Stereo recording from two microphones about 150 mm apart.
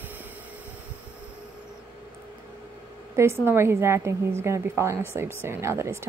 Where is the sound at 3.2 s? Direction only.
15° right (ahead or behind).